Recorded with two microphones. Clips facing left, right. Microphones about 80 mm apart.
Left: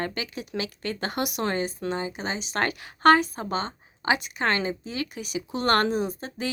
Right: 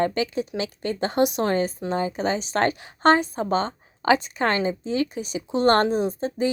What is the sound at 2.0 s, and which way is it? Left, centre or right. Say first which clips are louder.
A woman's voice: right 7 dB; right.